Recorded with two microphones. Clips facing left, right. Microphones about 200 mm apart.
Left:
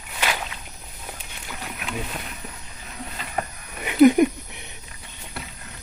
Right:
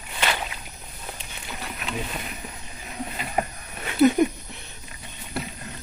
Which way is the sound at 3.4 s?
15° right (ahead or behind).